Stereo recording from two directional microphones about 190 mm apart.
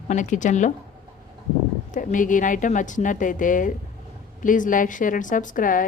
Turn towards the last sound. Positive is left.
turn(degrees=45)  # may be behind; listen again after turning